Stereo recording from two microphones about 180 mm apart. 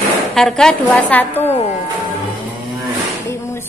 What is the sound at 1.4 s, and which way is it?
Speech, 35° left (ahead or behind).